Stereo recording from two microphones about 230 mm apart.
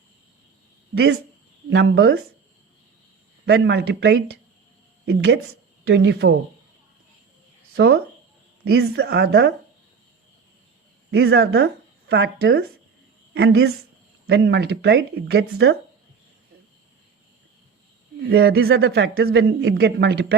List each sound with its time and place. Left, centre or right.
1.7 s speech: right
3.4 s speech: right
7.8 s speech: right
11.1 s speech: right
18.3 s speech: right